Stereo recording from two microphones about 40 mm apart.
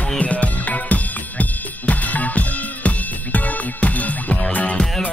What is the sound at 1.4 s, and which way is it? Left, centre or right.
Drum kit, left.